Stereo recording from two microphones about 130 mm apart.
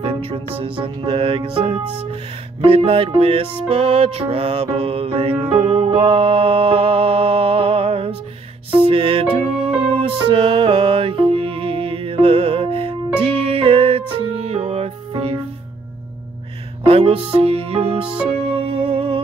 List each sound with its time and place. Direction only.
0.0 s music: 50° right (ahead or behind)
16.8 s music: 45° right (ahead or behind)